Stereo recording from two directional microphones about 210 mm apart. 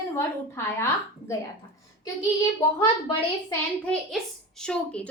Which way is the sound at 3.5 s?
5° left (ahead or behind).